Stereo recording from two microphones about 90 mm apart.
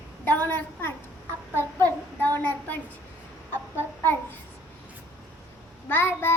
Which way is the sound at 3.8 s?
25° left (ahead or behind).